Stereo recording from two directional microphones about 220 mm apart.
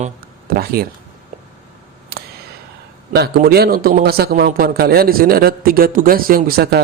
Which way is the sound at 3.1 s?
45° right (ahead or behind).